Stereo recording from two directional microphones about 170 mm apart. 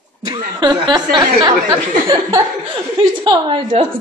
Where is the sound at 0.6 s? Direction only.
25° right (ahead or behind).